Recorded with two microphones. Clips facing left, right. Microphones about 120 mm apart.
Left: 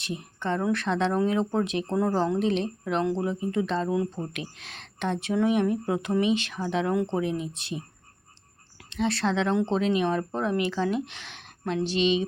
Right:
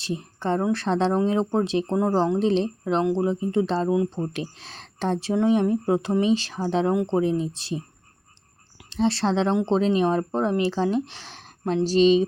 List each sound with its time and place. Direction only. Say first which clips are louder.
0.0 s speech: right 4 dB; 30° right (ahead or behind)
4.3 s speech: right 5 dB; 30° right (ahead or behind)
8.9 s speech: right 4 dB; 30° right (ahead or behind)